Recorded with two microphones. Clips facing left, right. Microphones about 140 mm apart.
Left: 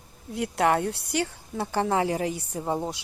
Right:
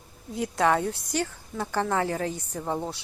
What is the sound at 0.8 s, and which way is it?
Speech, 70° left (ahead or behind).